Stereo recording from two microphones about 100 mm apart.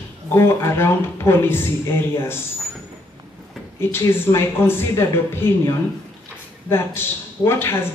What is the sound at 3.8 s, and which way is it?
A woman's voice, 25° left (ahead or behind).